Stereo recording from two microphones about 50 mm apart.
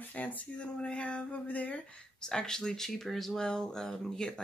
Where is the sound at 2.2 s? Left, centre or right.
Centre.